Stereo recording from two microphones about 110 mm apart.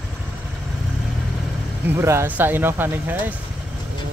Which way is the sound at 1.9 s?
25° right (ahead or behind).